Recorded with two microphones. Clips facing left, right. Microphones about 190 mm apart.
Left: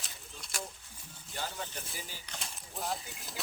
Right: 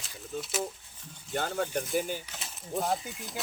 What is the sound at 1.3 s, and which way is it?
Speech, 55° right (ahead or behind).